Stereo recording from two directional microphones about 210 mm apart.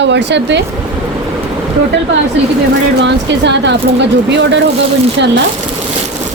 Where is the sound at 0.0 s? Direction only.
55° right (ahead or behind).